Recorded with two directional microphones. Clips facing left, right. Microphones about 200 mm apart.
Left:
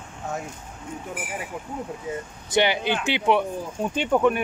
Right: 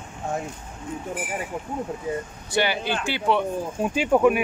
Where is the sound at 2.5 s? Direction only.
20° left (ahead or behind).